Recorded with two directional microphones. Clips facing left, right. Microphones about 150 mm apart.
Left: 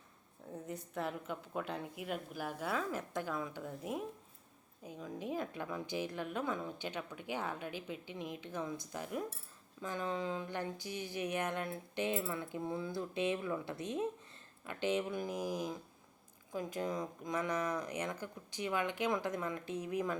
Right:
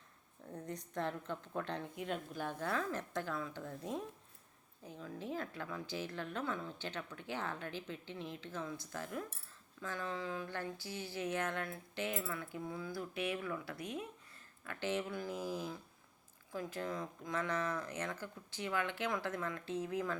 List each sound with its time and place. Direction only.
0.5 s speech: 5° left (ahead or behind)